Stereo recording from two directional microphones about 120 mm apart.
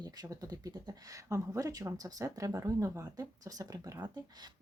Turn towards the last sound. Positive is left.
turn(degrees=-30)  # may be behind; listen again after turning